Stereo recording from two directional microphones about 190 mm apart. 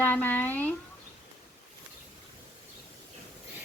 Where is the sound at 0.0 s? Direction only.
10° left (ahead or behind).